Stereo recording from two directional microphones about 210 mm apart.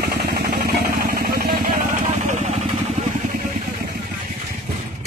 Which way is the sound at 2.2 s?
35° right (ahead or behind).